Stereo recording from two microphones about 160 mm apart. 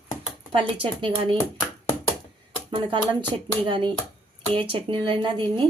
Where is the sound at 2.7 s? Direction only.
30° right (ahead or behind).